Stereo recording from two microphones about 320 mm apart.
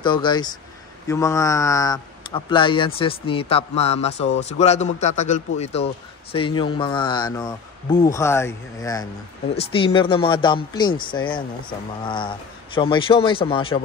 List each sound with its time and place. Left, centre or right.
0.0 s speech: centre